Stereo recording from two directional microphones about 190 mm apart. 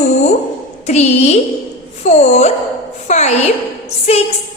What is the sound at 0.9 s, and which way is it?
A woman's voice, 35° left (ahead or behind).